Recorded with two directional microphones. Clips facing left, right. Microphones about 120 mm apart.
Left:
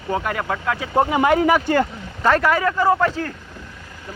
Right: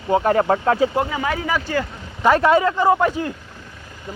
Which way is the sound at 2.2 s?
20° right (ahead or behind).